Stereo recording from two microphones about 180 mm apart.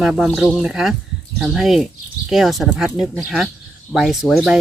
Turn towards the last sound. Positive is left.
turn(degrees=0)  # may be behind; listen again after turning